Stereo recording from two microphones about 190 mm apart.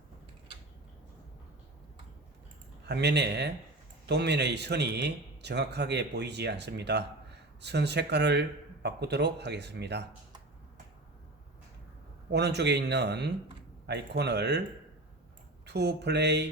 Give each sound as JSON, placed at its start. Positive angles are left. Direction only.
{"t": 2.8, "sound": "a man's voice", "side_deg": -60}
{"t": 12.3, "sound": "a man's voice", "side_deg": -60}
{"t": 15.6, "sound": "a man's voice", "side_deg": -60}